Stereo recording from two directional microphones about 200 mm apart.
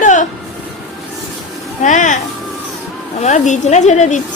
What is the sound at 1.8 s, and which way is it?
Speech, 40° left (ahead or behind).